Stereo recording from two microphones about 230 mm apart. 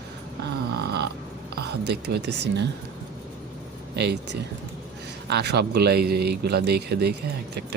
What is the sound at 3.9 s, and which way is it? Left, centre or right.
Speech, right.